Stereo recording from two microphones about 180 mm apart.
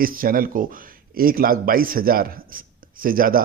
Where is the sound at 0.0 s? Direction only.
50° right (ahead or behind).